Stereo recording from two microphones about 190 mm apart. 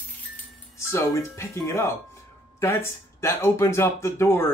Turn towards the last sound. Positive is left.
turn(degrees=15)  # may be behind; listen again after turning